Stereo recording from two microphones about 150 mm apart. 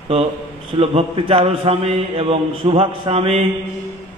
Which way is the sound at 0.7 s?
40° right (ahead or behind).